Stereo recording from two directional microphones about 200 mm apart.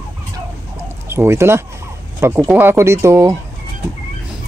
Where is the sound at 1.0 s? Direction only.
10° right (ahead or behind).